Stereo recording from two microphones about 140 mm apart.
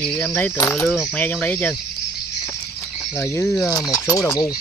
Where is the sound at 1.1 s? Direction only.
10° left (ahead or behind).